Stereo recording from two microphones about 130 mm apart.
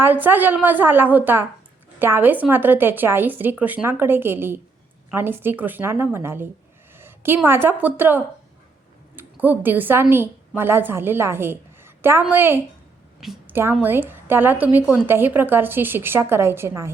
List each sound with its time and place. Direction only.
0.0 s a woman's voice: 15° right (ahead or behind)
6.9 s a sound: 15° right (ahead or behind)
7.4 s a woman's voice: 15° right (ahead or behind)
13.1 s a woman's voice: centre (ahead or behind)
13.5 s a woman's voice: 15° right (ahead or behind)